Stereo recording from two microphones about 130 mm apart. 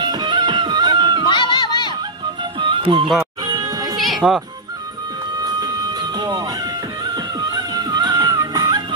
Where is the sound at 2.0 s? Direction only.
35° right (ahead or behind).